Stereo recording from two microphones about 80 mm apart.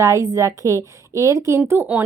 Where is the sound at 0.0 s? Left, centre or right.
Right.